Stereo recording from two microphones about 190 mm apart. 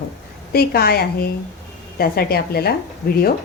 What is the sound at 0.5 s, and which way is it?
A woman's voice, 55° left (ahead or behind).